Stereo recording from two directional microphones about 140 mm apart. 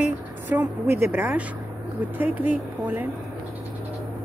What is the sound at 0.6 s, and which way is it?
Speech, 15° right (ahead or behind).